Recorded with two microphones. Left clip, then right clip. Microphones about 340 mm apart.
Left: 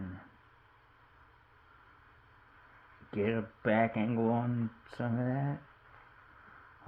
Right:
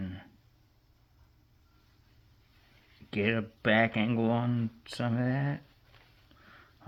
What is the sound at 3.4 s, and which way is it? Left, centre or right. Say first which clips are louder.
Speech: right 4 dB; right.